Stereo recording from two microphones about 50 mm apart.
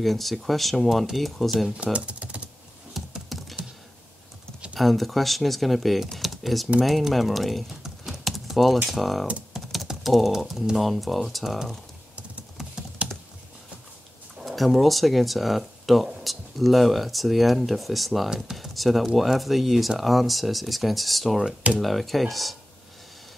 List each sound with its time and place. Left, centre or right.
0.0 s speech: centre
1.8 s speech: right
2.9 s computer keyboard: centre
4.7 s speech: centre
13.0 s computer keyboard: right
14.4 s speech: centre